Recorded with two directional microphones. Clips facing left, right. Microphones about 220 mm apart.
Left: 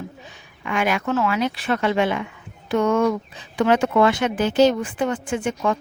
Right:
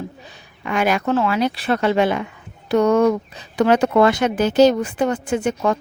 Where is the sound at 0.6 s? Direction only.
40° right (ahead or behind).